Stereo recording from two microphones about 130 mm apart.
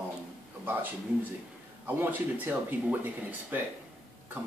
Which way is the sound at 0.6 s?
15° right (ahead or behind).